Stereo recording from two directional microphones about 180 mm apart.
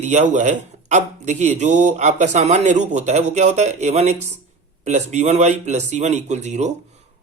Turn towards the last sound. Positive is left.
turn(degrees=-40)  # may be behind; listen again after turning